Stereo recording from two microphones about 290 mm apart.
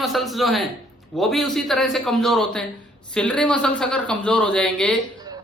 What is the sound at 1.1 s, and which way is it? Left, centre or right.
A man's voice, centre.